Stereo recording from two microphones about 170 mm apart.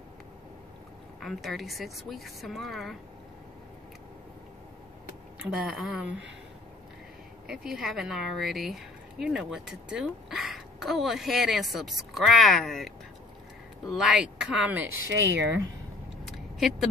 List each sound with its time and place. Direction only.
1.2 s a woman's voice: centre (ahead or behind)
5.4 s a woman's voice: 5° right (ahead or behind)
7.4 s a woman's voice: 5° right (ahead or behind)
15.1 s speech: 90° right
16.3 s a sound: centre (ahead or behind)